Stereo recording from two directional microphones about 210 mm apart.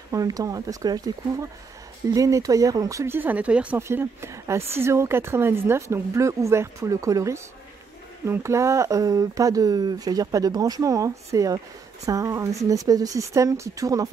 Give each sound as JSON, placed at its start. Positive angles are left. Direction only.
{"t": 0.1, "sound": "speech", "side_deg": -15}